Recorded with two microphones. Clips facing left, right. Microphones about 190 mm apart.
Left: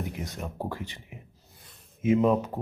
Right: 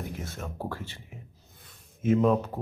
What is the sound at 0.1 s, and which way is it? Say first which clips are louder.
Speech: left 1 dB; 15° left (ahead or behind).